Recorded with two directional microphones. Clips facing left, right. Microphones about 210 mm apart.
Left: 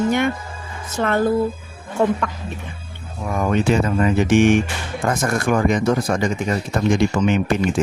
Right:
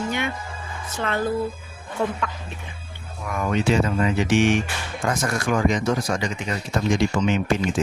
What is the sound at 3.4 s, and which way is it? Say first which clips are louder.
Speech: left 2 dB; 50° left (ahead or behind).